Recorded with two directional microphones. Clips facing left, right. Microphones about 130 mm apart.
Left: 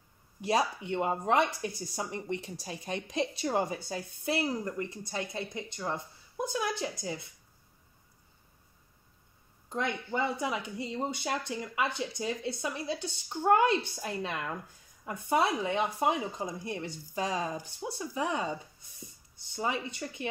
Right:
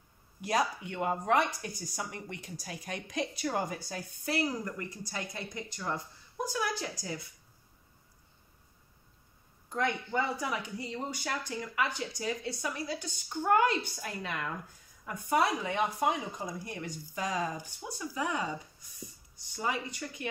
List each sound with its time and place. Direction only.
0.4 s speech: 25° left (ahead or behind)
10.1 s speech: 25° left (ahead or behind)
19.5 s speech: 25° left (ahead or behind)